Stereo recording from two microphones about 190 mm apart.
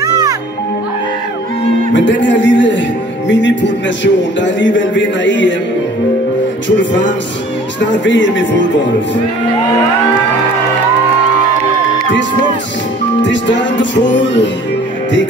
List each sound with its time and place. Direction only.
2.0 s a man's voice: 75° left (ahead or behind)
6.8 s a man's voice: 70° left (ahead or behind)
13.2 s a man's voice: 70° left (ahead or behind)